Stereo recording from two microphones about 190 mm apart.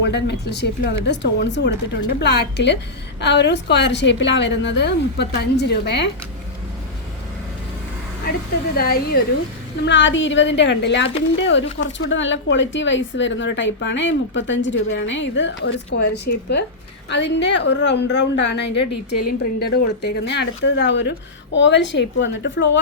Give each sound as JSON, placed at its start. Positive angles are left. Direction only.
{"t": 0.0, "sound": "a woman's voice", "side_deg": 65}
{"t": 8.7, "sound": "speech", "side_deg": 55}
{"t": 9.8, "sound": "a woman's voice", "side_deg": 70}